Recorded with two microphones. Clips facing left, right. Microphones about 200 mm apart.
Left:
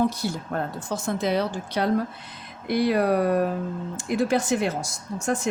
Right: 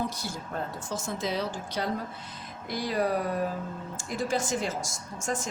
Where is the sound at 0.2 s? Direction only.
60° left (ahead or behind).